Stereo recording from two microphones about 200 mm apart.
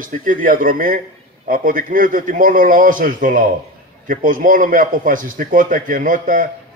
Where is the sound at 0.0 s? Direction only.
40° right (ahead or behind).